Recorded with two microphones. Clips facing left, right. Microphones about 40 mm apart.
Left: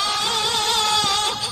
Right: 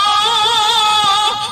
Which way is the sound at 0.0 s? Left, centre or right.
Right.